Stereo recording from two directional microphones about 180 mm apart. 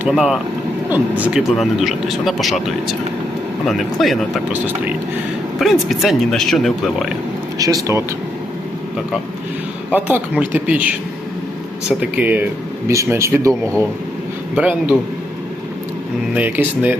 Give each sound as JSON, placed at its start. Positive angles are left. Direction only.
{"t": 0.0, "sound": "speech", "side_deg": -5}
{"t": 7.6, "sound": "speech", "side_deg": -20}
{"t": 9.9, "sound": "speech", "side_deg": -10}
{"t": 12.2, "sound": "speech", "side_deg": -10}
{"t": 16.3, "sound": "speech", "side_deg": -10}